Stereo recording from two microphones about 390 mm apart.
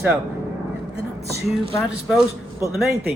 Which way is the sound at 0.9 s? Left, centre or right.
Right.